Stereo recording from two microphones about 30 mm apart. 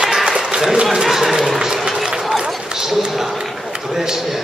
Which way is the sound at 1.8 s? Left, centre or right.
Right.